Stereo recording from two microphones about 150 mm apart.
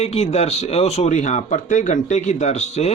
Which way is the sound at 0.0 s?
45° left (ahead or behind).